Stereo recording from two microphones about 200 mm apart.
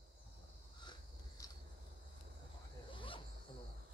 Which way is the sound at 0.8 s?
15° left (ahead or behind).